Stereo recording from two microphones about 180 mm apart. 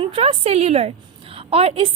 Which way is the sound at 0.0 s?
30° right (ahead or behind).